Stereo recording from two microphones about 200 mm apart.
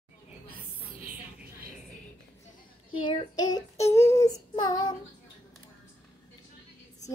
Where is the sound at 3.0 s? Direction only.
20° left (ahead or behind).